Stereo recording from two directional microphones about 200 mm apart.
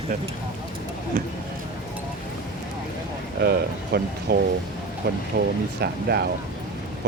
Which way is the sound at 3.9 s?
55° right (ahead or behind).